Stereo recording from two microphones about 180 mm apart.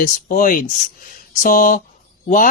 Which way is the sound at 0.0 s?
50° left (ahead or behind).